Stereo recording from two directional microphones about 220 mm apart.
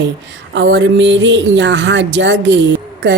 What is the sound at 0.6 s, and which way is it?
Speech, 55° right (ahead or behind).